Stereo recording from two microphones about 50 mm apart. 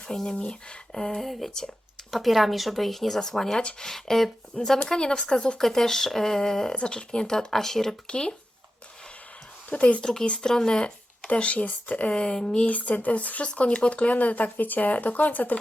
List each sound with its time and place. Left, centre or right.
0.3 s speech: centre
3.6 s speech: left
3.8 s speech: centre
5.6 s speech: centre
8.0 s speech: left
9.6 s speech: left
10.0 s speech: centre; by 12.1 s left
12.1 s speech: centre
12.6 s speech: left